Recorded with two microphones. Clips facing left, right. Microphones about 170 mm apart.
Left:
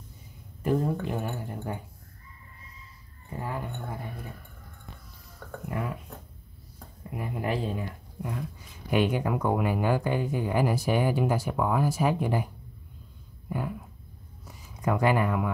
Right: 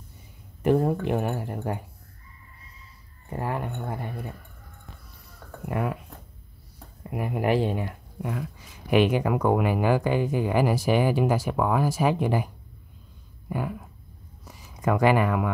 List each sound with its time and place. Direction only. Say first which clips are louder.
0.6 s speech: right 5 dB; 70° right (ahead or behind)
3.3 s speech: right 5 dB; 65° right (ahead or behind)
5.7 s speech: right 5 dB; 60° right (ahead or behind)
7.0 s speech: right 5 dB; 70° right (ahead or behind); by 12.4 s 90° right
14.9 s speech: right 3 dB; 85° right